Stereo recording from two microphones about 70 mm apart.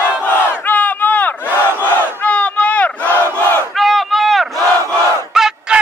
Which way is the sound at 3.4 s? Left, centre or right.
Left.